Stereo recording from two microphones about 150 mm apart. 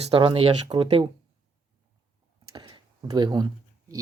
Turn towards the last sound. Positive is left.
turn(degrees=-30)  # may be behind; listen again after turning